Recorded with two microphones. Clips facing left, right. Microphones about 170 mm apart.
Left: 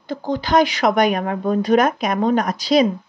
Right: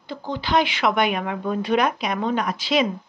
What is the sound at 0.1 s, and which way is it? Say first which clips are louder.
Speech: left 4 dB; 45° left (ahead or behind).